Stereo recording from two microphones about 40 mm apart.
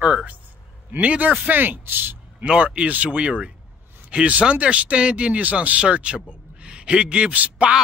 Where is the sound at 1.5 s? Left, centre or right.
Right.